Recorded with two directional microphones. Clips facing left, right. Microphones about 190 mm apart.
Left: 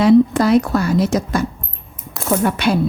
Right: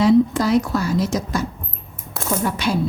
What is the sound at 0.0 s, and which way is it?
Speech, 60° left (ahead or behind).